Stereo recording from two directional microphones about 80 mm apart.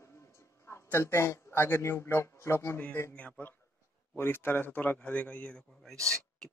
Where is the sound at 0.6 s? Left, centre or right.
Left.